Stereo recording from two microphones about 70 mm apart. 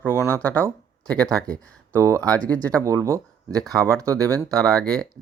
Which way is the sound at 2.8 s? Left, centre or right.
Right.